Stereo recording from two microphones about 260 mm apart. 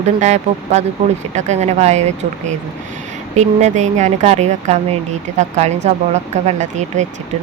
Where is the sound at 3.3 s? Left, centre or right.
Right.